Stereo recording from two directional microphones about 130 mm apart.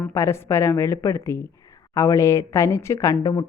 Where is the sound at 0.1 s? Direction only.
20° left (ahead or behind).